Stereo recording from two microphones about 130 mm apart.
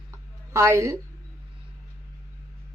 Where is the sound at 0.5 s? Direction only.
25° right (ahead or behind).